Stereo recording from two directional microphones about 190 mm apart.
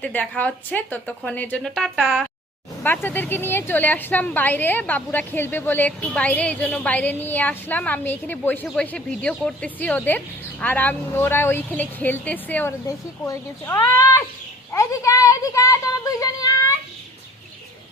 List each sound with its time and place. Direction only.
0.0 s a woman's voice: 10° left (ahead or behind)
2.8 s a woman's voice: 10° left (ahead or behind)